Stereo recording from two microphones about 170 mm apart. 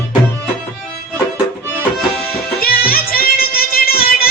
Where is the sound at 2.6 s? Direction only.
60° left (ahead or behind).